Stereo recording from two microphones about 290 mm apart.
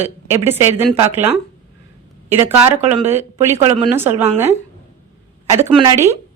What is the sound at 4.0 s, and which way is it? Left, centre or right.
Speech, centre.